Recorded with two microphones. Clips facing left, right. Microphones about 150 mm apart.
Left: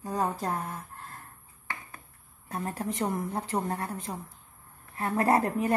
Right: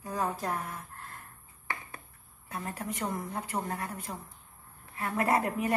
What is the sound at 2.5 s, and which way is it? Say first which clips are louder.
A woman's voice: left 4 dB; 35° left (ahead or behind).